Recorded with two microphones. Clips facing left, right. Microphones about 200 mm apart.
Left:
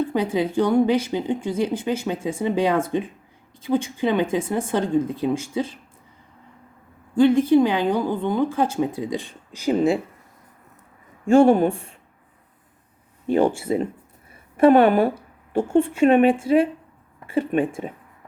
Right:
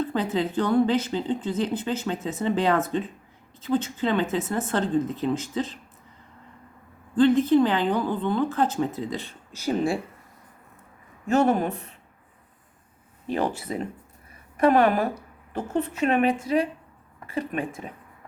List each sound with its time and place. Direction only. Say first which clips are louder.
0.0 s a woman's voice: left 3 dB; 10° left (ahead or behind)
7.2 s a woman's voice: left 3 dB; 10° left (ahead or behind)
11.3 s speech: left 7 dB; 30° left (ahead or behind)
13.3 s a woman's voice: left 7 dB; 25° left (ahead or behind)